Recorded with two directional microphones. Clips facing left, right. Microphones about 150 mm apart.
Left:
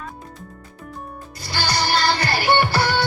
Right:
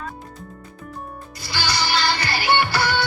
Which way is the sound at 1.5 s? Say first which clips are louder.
Left 2 dB; 50° left (ahead or behind).